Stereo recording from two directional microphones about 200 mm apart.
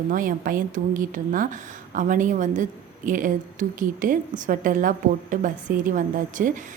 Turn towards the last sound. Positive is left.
turn(degrees=-40)  # may be behind; listen again after turning